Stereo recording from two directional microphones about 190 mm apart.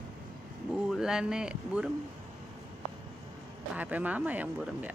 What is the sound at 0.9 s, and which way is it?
A woman's voice, 5° right (ahead or behind).